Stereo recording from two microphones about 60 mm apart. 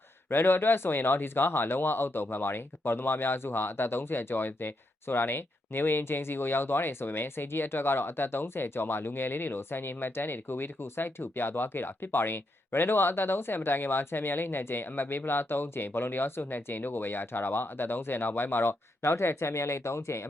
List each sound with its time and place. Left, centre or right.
0.3 s speech: left
19.1 s speech: left